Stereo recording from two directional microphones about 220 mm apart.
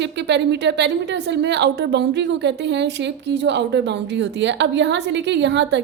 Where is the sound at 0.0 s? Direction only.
50° right (ahead or behind).